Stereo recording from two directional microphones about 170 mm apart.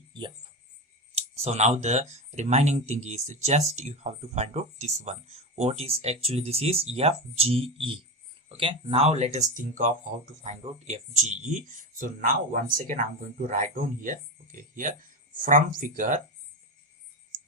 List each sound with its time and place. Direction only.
1.1 s speech: 40° right (ahead or behind)